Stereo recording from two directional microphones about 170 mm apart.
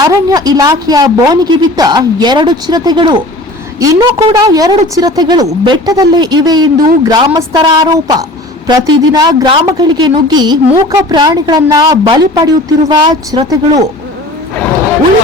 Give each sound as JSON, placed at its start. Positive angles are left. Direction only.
{"t": 0.0, "sound": "a woman's voice", "side_deg": -20}